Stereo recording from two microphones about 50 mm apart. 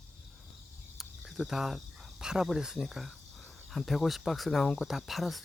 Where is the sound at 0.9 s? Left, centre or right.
Centre.